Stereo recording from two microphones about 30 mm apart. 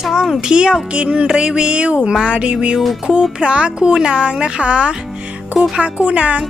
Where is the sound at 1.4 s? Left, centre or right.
Right.